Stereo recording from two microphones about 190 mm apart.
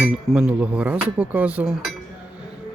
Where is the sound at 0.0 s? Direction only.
5° right (ahead or behind).